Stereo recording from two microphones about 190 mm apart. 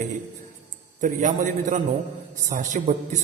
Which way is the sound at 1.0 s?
40° right (ahead or behind).